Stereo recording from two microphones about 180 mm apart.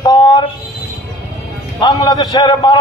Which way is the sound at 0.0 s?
25° left (ahead or behind).